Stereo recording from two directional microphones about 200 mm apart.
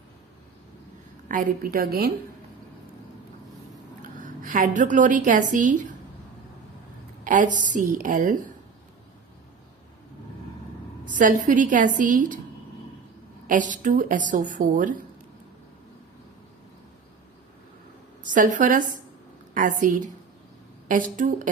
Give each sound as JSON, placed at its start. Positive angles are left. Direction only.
{"t": 1.3, "sound": "a woman's voice", "side_deg": -45}
{"t": 4.2, "sound": "a woman's voice", "side_deg": -40}
{"t": 7.3, "sound": "a woman's voice", "side_deg": -40}
{"t": 11.0, "sound": "a woman's voice", "side_deg": -40}
{"t": 13.5, "sound": "a woman's voice", "side_deg": -40}
{"t": 18.2, "sound": "a woman's voice", "side_deg": -40}